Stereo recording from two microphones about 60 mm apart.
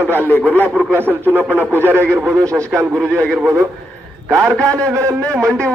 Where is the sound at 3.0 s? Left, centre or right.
Centre.